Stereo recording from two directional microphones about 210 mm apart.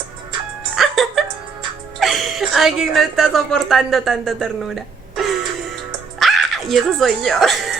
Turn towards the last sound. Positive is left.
turn(degrees=0)  # may be behind; listen again after turning